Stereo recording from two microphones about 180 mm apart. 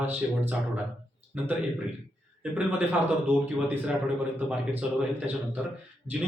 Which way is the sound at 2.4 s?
10° right (ahead or behind).